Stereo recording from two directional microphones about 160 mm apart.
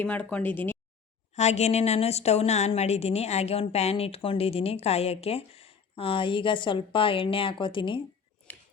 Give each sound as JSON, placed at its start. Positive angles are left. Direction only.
{"t": 0.0, "sound": "speech", "side_deg": 10}
{"t": 1.4, "sound": "a woman's voice", "side_deg": 45}